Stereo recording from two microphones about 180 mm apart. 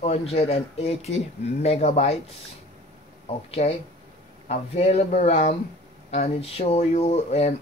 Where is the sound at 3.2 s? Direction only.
35° left (ahead or behind).